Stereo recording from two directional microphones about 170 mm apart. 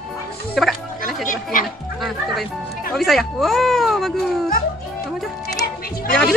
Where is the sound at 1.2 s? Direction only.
50° left (ahead or behind).